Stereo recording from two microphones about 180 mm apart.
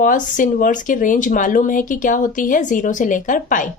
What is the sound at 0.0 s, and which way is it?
A woman's voice, 45° left (ahead or behind).